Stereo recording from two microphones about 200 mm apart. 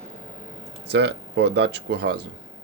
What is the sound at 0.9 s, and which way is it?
Speech, 55° right (ahead or behind).